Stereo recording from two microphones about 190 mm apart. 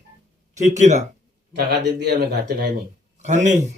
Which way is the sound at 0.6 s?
40° right (ahead or behind).